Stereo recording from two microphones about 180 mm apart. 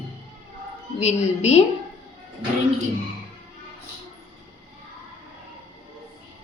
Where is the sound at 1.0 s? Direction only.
40° left (ahead or behind).